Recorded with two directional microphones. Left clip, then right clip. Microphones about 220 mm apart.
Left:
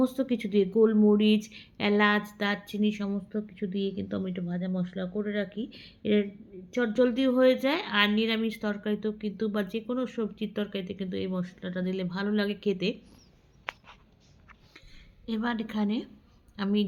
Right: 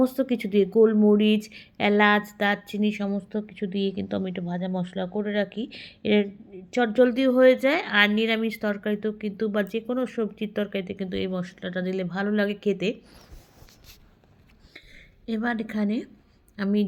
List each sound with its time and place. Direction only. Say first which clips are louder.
0.0 s speech: right 4 dB; 15° right (ahead or behind)
15.3 s speech: right 4 dB; 10° right (ahead or behind)